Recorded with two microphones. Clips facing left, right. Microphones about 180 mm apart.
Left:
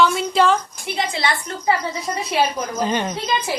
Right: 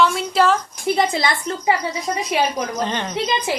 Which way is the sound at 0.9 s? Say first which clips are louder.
Right 5 dB; 40° right (ahead or behind).